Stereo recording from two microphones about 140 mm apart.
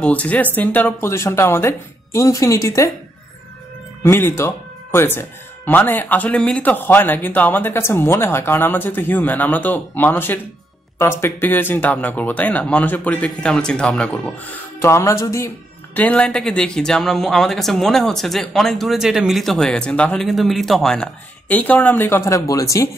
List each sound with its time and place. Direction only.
0.0 s speech: 10° left (ahead or behind)
4.0 s speech: 15° left (ahead or behind)
14.8 s speech: 20° left (ahead or behind)